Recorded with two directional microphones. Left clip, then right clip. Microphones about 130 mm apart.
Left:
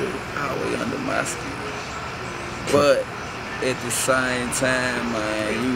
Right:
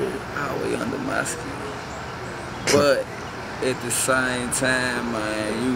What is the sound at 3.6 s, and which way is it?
Speech, centre (ahead or behind).